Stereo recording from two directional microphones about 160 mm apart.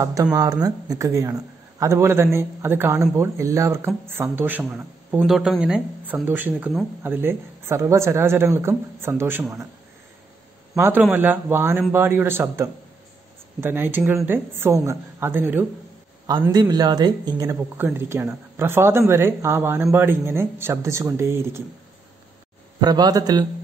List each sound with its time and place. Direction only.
0.0 s a man's voice: 20° right (ahead or behind)
10.8 s speech: 10° right (ahead or behind)
16.5 s a man's voice: 25° right (ahead or behind)
22.8 s a man's voice: 25° right (ahead or behind)